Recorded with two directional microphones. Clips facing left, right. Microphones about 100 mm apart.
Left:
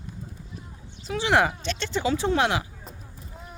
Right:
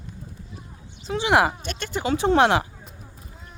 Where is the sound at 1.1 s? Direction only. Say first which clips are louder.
Right 2 dB; 20° right (ahead or behind).